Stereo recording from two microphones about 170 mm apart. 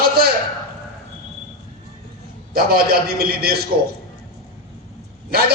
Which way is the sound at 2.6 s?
60° right (ahead or behind).